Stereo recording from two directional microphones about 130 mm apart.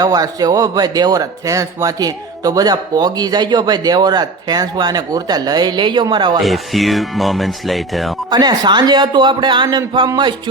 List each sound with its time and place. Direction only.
0.0 s speech: 30° right (ahead or behind)
6.4 s speech: centre (ahead or behind)
8.3 s speech: 35° right (ahead or behind)